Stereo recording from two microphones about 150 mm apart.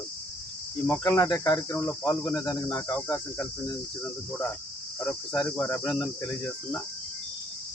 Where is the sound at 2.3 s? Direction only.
25° left (ahead or behind).